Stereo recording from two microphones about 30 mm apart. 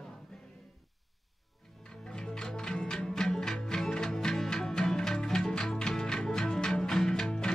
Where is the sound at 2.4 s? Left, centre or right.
Left.